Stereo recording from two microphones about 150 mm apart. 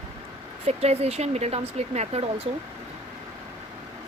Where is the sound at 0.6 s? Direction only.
45° right (ahead or behind).